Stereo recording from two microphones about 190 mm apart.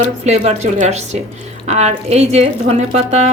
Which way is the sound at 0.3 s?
35° right (ahead or behind).